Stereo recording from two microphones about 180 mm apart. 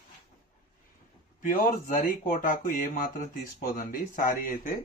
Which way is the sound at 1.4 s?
50° left (ahead or behind).